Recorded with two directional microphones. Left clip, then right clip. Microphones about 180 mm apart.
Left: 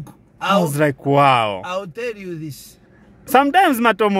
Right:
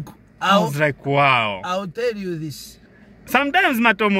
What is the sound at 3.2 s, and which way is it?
Speech, 40° left (ahead or behind).